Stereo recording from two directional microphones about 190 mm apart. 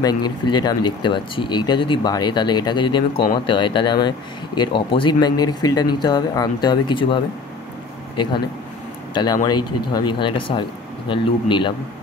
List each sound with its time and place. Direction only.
0.0 s speech: 20° left (ahead or behind)
9.1 s speech: 20° left (ahead or behind)